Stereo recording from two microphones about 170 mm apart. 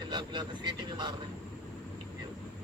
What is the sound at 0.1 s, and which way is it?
Speech, 25° right (ahead or behind).